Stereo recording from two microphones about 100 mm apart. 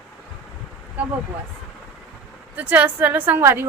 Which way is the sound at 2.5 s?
15° right (ahead or behind).